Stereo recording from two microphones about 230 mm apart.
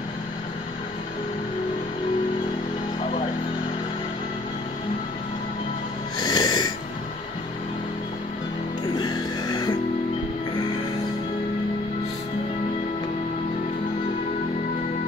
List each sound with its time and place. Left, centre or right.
6.1 s wheeze: centre
8.8 s music: centre